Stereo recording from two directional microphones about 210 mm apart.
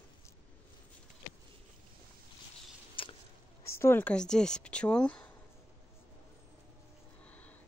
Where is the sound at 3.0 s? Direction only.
25° left (ahead or behind).